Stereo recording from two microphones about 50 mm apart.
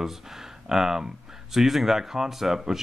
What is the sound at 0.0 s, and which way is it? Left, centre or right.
Speech, centre.